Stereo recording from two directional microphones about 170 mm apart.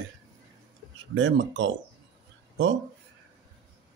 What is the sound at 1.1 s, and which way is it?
Speech, 90° right.